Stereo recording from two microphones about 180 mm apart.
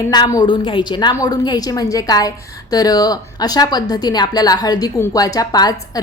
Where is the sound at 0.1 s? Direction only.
25° left (ahead or behind).